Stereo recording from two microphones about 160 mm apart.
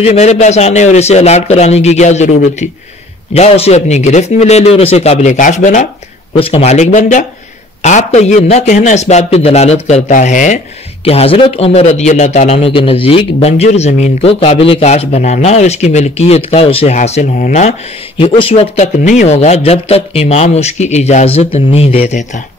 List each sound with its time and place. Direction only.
0.0 s a man's voice: 45° left (ahead or behind)
11.1 s a man's voice: 40° left (ahead or behind)